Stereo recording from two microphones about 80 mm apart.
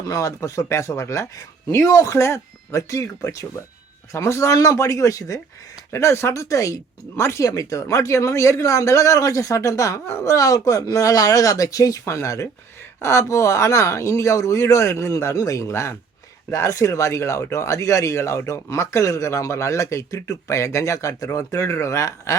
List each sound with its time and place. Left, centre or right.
0.0 s speech: left